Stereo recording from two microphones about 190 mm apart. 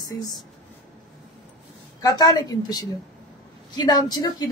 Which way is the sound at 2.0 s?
20° left (ahead or behind).